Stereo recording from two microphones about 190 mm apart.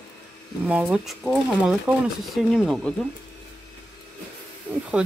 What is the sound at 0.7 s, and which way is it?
Speech, 5° right (ahead or behind).